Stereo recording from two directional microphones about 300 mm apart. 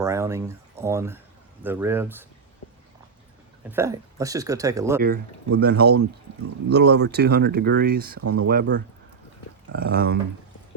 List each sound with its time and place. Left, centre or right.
0.0 s speech: centre
3.7 s speech: centre
4.9 s speech: right
8.2 s speech: right
8.4 s speech: right